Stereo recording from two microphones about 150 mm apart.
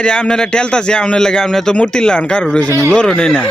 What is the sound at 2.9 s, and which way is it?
Speech, 5° left (ahead or behind).